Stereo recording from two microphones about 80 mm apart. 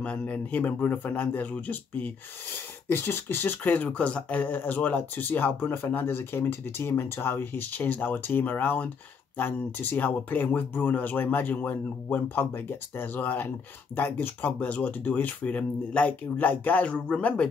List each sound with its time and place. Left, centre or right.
0.0 s speech: centre
2.9 s speech: left; by 17.5 s centre